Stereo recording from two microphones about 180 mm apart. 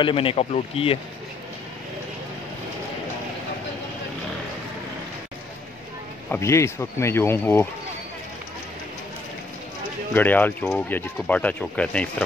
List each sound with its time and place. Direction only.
0.0 s speech: 30° left (ahead or behind)
6.3 s speech: 15° left (ahead or behind)
10.1 s speech: 10° left (ahead or behind)